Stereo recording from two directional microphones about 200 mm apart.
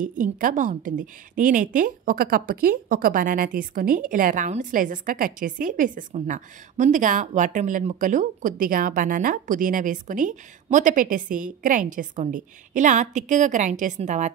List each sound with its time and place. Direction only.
0.0 s a woman's voice: 40° right (ahead or behind)